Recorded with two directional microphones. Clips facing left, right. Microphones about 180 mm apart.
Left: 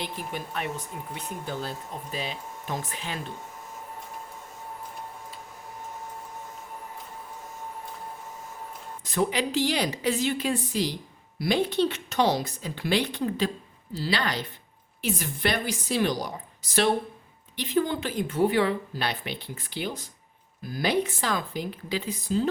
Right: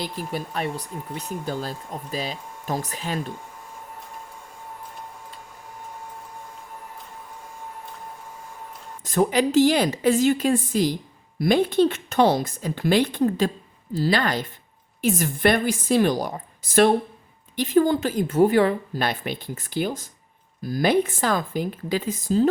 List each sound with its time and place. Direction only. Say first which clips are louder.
0.3 s speech: right 5 dB; 35° right (ahead or behind)
9.0 s speech: right 6 dB; 45° right (ahead or behind)